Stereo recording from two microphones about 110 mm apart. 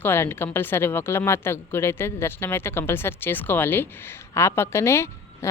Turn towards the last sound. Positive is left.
turn(degrees=25)  # may be behind; listen again after turning